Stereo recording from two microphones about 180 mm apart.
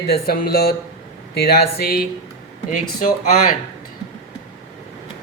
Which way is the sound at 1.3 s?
65° left (ahead or behind).